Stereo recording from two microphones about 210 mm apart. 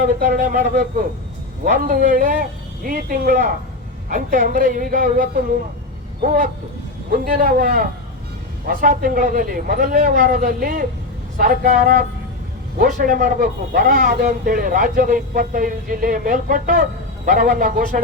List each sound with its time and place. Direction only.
0.0 s a man's voice: 40° right (ahead or behind)